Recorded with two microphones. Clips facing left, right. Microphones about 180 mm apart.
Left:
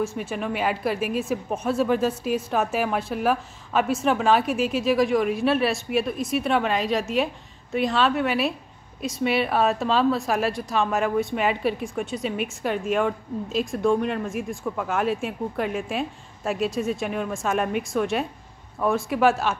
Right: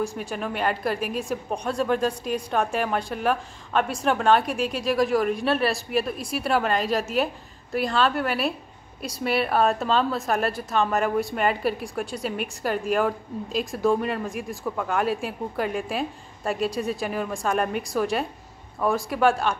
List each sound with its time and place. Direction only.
0.0 s a woman's voice: centre (ahead or behind)